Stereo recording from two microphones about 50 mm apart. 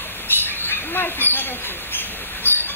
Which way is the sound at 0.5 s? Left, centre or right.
Left.